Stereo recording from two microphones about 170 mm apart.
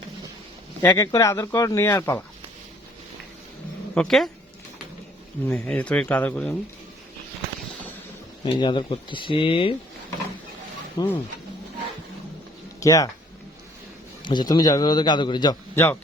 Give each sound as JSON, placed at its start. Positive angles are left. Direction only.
{"t": 0.8, "sound": "speech", "side_deg": 15}
{"t": 3.9, "sound": "speech", "side_deg": 5}
{"t": 5.5, "sound": "speech", "side_deg": 10}
{"t": 8.4, "sound": "speech", "side_deg": 25}
{"t": 10.9, "sound": "speech", "side_deg": 10}
{"t": 12.8, "sound": "speech", "side_deg": 20}
{"t": 14.2, "sound": "a man's voice", "side_deg": 25}
{"t": 15.7, "sound": "a man's voice", "side_deg": 15}